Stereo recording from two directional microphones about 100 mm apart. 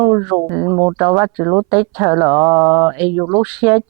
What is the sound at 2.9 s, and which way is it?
Speech, 15° right (ahead or behind).